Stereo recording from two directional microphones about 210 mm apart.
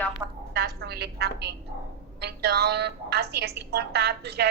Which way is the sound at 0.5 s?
50° right (ahead or behind).